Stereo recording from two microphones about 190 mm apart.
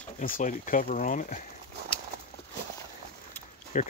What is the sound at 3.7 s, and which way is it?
Speech, 35° left (ahead or behind).